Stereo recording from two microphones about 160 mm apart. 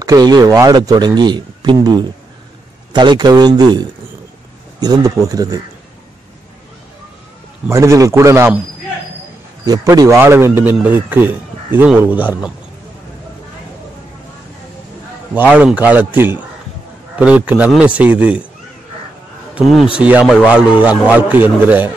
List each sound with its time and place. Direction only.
0.0 s a man's voice: 25° right (ahead or behind)
7.6 s a man's voice: 20° right (ahead or behind)
9.7 s a man's voice: 20° right (ahead or behind)
15.5 s a man's voice: 10° right (ahead or behind)
19.5 s a man's voice: centre (ahead or behind)